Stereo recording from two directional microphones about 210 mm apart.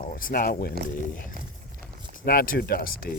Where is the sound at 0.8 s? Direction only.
45° right (ahead or behind).